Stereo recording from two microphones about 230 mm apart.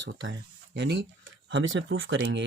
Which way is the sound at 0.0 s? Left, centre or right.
Right.